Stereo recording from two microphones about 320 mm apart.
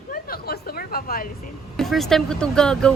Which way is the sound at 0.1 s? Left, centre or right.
Left.